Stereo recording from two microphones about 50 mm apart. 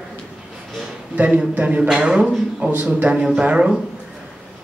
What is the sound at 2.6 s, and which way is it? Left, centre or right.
Speech, right.